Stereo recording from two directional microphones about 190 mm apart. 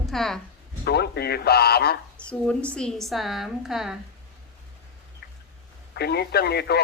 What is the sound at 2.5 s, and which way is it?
A woman's voice, 5° left (ahead or behind).